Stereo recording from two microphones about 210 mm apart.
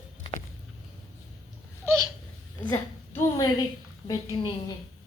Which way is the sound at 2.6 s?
10° left (ahead or behind).